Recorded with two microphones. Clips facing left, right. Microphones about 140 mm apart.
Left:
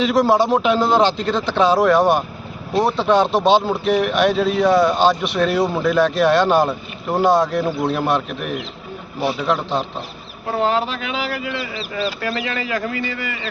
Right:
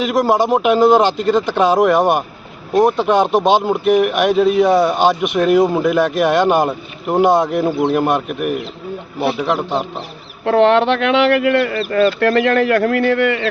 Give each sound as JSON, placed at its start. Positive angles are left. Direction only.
{"t": 0.4, "sound": "speech", "side_deg": -15}
{"t": 10.4, "sound": "speech", "side_deg": -80}